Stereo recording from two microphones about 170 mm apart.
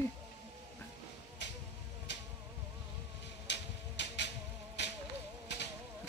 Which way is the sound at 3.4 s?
90° left.